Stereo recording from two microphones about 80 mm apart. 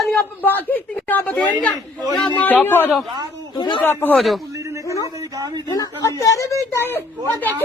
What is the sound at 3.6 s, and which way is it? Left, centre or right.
Speech, left.